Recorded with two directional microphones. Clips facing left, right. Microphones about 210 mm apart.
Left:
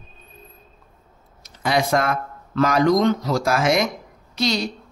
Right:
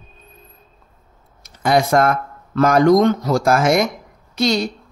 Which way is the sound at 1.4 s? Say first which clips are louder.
Right 5 dB; 50° right (ahead or behind).